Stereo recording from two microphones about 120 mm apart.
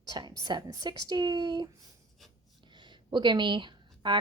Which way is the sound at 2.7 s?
40° right (ahead or behind).